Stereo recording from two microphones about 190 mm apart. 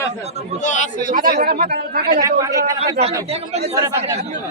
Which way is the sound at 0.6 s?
40° left (ahead or behind).